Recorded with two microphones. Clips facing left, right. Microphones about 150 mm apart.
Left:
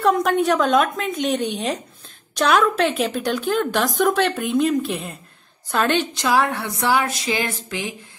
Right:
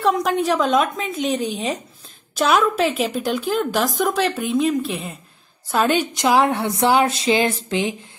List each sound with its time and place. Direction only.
0.0 s a woman's voice: centre (ahead or behind); by 7.9 s 25° right (ahead or behind)